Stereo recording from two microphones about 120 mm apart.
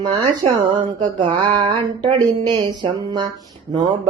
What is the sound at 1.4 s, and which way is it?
Speech, 40° right (ahead or behind).